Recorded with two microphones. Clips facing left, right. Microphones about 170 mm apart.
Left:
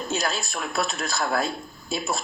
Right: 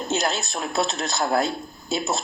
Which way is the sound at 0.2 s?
20° right (ahead or behind).